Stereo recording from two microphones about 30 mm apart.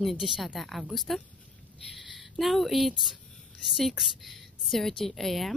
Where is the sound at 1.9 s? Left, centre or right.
Centre.